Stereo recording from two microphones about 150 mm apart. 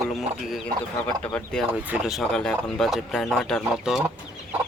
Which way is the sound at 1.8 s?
5° right (ahead or behind).